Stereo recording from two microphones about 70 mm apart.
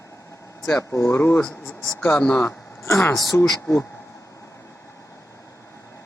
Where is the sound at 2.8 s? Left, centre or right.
Left.